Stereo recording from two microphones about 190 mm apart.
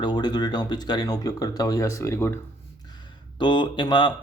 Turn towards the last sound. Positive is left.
turn(degrees=25)  # may be behind; listen again after turning